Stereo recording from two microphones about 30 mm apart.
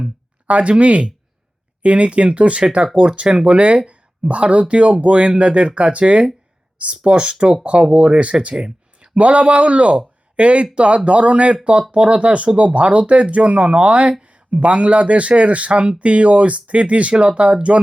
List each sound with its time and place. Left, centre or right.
0.0 s speech: right
2.8 s speech: right
7.0 s speech: right
7.6 s speech: right
9.1 s speech: right